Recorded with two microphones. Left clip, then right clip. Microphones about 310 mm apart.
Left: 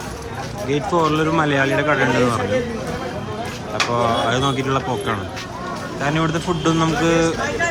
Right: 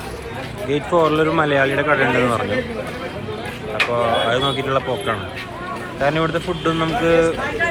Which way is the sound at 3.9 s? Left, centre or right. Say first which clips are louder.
Even; centre.